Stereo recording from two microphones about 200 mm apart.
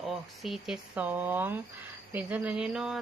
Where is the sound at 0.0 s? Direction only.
Centre (ahead or behind).